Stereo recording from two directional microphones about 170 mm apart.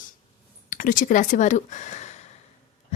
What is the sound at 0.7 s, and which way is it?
Speech, 55° left (ahead or behind).